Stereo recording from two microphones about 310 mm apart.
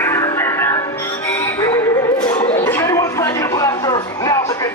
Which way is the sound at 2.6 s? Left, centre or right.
Centre.